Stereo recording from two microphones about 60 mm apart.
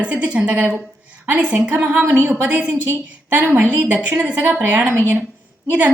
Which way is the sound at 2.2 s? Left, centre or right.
Right.